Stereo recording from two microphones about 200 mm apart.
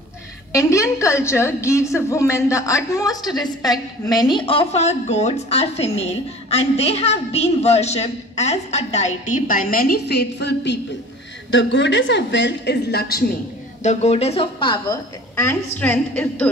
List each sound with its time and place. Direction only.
0.5 s a woman's voice: 15° left (ahead or behind); by 13.3 s 50° left (ahead or behind)
13.8 s a woman's voice: 30° left (ahead or behind); by 16.4 s 5° left (ahead or behind)